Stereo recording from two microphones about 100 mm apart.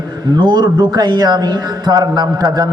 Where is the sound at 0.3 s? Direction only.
45° right (ahead or behind).